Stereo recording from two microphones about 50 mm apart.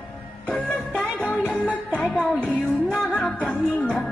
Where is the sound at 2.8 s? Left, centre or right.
Centre.